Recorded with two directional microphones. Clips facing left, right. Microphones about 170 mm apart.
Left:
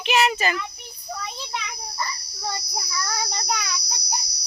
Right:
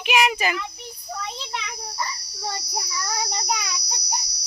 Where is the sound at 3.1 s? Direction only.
15° right (ahead or behind).